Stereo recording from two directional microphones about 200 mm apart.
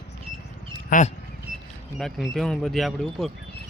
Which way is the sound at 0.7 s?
40° left (ahead or behind).